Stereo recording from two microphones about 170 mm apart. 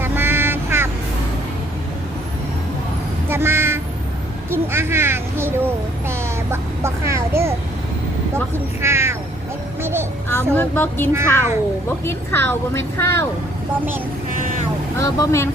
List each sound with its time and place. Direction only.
0.0 s quack: 15° right (ahead or behind)
3.2 s a sound: 15° right (ahead or behind)
4.5 s a child's voice: 15° right (ahead or behind)
8.5 s speech: 15° right (ahead or behind)
10.5 s a woman's voice: 10° left (ahead or behind)
11.1 s speech: 15° right (ahead or behind)
12.0 s a woman's voice: 15° left (ahead or behind)
14.9 s a woman's voice: 20° left (ahead or behind)